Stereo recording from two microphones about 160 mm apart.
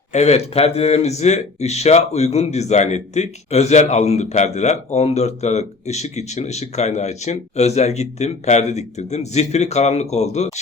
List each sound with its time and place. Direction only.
0.1 s speech: 45° left (ahead or behind)